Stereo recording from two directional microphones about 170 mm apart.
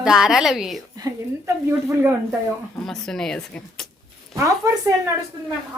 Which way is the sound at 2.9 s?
Centre (ahead or behind).